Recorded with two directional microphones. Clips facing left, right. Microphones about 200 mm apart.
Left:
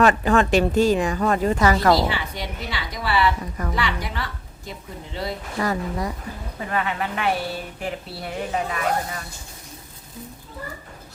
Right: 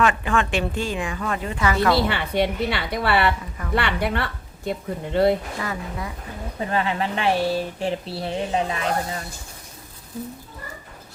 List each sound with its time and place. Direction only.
0.0 s speech: 40° left (ahead or behind)
2.0 s a woman's voice: 60° right (ahead or behind)
5.5 s speech: 40° left (ahead or behind)
6.7 s speech: 30° right (ahead or behind)